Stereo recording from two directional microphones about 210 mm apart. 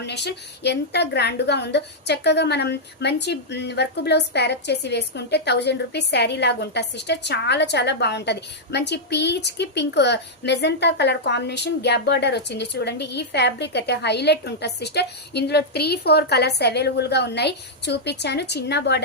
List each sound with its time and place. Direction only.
0.0 s a woman's voice: 55° left (ahead or behind)